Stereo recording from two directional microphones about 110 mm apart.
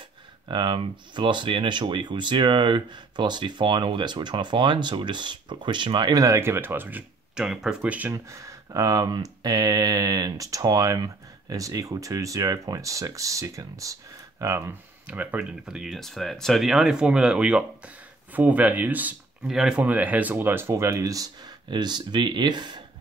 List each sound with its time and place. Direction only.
0.5 s speech: 45° right (ahead or behind); by 8.1 s 10° right (ahead or behind)
8.1 s speech: 25° right (ahead or behind)
15.0 s speech: 15° right (ahead or behind); by 22.8 s 40° right (ahead or behind)